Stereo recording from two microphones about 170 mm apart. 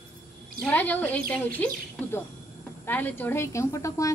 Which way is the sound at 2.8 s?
10° left (ahead or behind).